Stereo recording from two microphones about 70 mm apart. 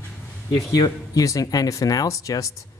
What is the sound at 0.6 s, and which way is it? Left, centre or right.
Speech, left.